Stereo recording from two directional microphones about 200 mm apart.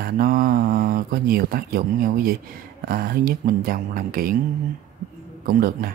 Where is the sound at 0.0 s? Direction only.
45° right (ahead or behind).